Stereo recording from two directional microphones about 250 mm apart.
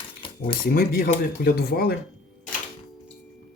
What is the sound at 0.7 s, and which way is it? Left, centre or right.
Speech, left.